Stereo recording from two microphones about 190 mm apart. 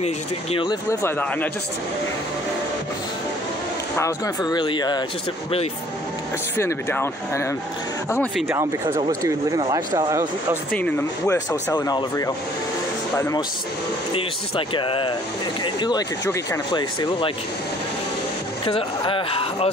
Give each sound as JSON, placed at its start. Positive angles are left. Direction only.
{"t": 0.0, "sound": "speech", "side_deg": 30}
{"t": 0.8, "sound": "speech", "side_deg": 10}
{"t": 4.0, "sound": "speech", "side_deg": 20}
{"t": 6.5, "sound": "speech", "side_deg": 10}
{"t": 9.2, "sound": "speech", "side_deg": -20}
{"t": 10.7, "sound": "speech", "side_deg": 10}
{"t": 14.7, "sound": "speech", "side_deg": 25}
{"t": 18.7, "sound": "speech", "side_deg": 30}